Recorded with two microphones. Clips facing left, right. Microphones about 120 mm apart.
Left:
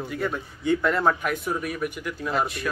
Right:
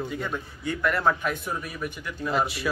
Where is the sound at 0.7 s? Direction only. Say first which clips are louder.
Left 3 dB; 20° left (ahead or behind).